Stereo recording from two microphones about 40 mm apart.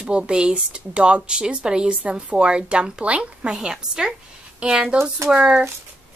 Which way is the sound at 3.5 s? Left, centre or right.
Centre.